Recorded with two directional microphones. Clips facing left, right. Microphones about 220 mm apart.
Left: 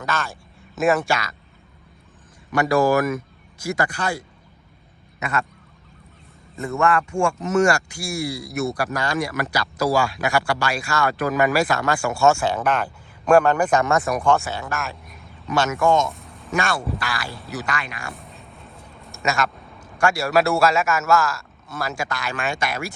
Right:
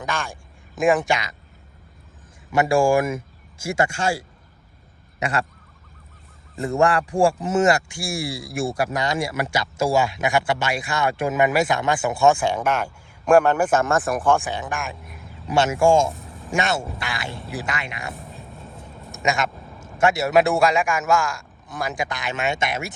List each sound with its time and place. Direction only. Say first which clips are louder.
0.0 s a man's voice: left 1 dB; 15° right (ahead or behind)
2.5 s speech: right 1 dB; 30° right (ahead or behind)
6.6 s speech: right 1 dB; 35° right (ahead or behind); by 14.3 s 5° right (ahead or behind)
14.3 s a man's voice: even; 15° right (ahead or behind)
15.0 s a sound: right 3 dB; centre (ahead or behind)
15.4 s speech: right 2 dB; 25° right (ahead or behind)
16.1 s a sound: right 3 dB; centre (ahead or behind)
16.5 s speech: even; 20° right (ahead or behind)
18.1 s vehicle: right 3 dB; centre (ahead or behind)
19.1 s a man's voice: even; 20° right (ahead or behind)